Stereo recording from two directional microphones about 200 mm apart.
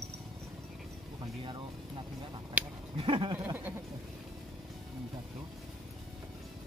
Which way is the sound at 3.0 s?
25° right (ahead or behind).